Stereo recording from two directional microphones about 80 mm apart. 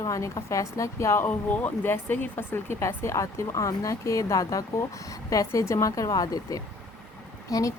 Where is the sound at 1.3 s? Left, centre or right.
Left.